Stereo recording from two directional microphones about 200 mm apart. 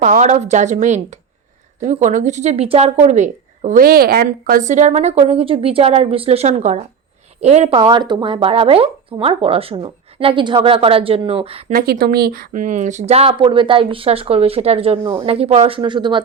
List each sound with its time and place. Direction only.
0.0 s a woman's voice: 40° right (ahead or behind)
11.7 s speech: 45° right (ahead or behind); by 16.2 s 25° right (ahead or behind)